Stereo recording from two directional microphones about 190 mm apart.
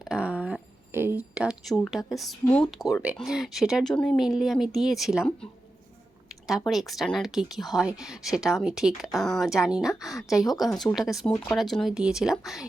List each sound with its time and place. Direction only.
0.1 s speech: 5° right (ahead or behind)
6.5 s a woman's voice: centre (ahead or behind)
10.7 s speech: 15° left (ahead or behind)
10.9 s a woman's voice: centre (ahead or behind)